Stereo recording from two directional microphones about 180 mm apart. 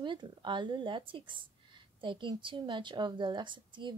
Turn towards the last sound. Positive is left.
turn(degrees=-25)  # may be behind; listen again after turning